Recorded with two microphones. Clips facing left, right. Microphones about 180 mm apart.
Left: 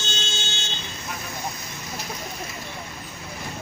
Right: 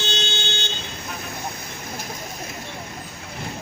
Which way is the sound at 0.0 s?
65° right (ahead or behind).